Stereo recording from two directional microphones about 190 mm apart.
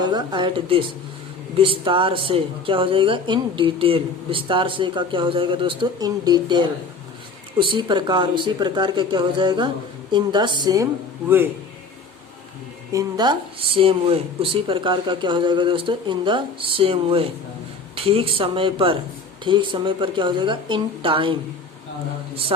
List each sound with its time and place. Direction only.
0.0 s a woman's voice: 20° right (ahead or behind)
12.9 s a woman's voice: 20° right (ahead or behind)